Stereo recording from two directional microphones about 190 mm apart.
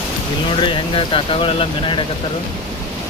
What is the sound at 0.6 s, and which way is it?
Speech, 25° left (ahead or behind).